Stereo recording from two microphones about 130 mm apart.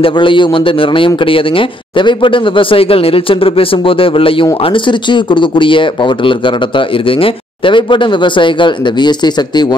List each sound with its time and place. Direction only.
0.0 s a man's voice: 40° left (ahead or behind)